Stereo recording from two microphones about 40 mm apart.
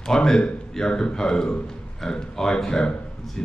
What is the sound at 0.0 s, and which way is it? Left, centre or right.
Speech, centre.